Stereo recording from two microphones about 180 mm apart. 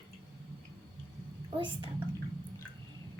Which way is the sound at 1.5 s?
30° right (ahead or behind).